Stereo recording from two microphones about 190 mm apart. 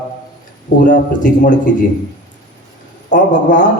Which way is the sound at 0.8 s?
40° left (ahead or behind).